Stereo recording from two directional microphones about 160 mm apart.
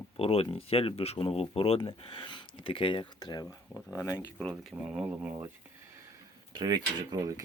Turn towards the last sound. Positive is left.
turn(degrees=-20)  # may be behind; listen again after turning